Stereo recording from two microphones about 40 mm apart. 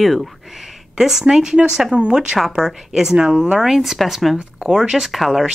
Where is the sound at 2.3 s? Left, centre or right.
Centre.